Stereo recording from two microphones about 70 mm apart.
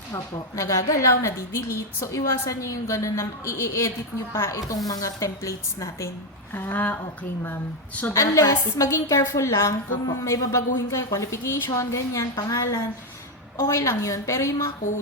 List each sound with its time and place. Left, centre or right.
0.5 s a woman's voice: left
4.9 s a woman's voice: left
6.5 s speech: left
8.1 s a woman's voice: left
11.7 s a woman's voice: left
12.5 s a woman's voice: left